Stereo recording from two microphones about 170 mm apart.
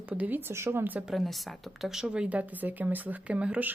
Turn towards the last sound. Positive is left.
turn(degrees=-5)  # may be behind; listen again after turning